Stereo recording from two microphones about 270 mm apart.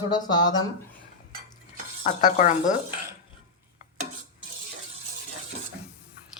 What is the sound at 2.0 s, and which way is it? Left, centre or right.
Speech, left.